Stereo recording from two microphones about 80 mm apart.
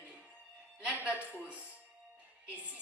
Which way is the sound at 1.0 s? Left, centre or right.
Centre.